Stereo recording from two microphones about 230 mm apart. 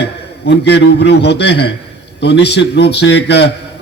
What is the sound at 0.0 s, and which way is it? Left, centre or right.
A man's voice, left.